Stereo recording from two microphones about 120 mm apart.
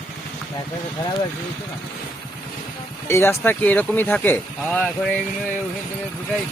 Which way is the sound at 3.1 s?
20° left (ahead or behind).